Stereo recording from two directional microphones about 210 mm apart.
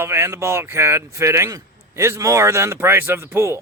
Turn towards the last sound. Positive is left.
turn(degrees=-10)  # may be behind; listen again after turning